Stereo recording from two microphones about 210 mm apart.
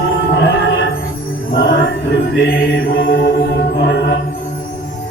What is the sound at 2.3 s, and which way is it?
Speech, 65° left (ahead or behind).